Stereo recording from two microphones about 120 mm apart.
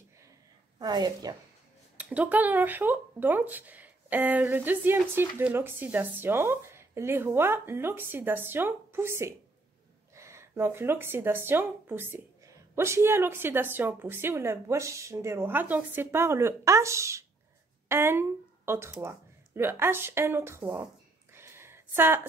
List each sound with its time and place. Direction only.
0.7 s a woman's voice: 35° right (ahead or behind)
2.0 s speech: 10° right (ahead or behind)
20.8 s a sound: 20° right (ahead or behind)